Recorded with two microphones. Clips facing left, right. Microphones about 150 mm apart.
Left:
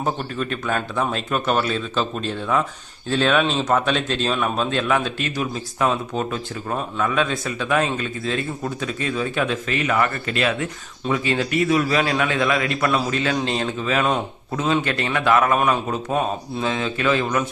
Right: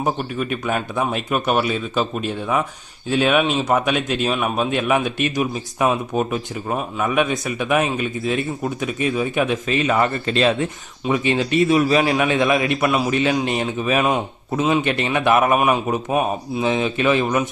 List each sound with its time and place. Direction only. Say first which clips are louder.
0.0 s a man's voice: right 2 dB; 10° right (ahead or behind)